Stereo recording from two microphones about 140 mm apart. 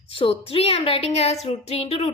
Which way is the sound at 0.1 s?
40° left (ahead or behind).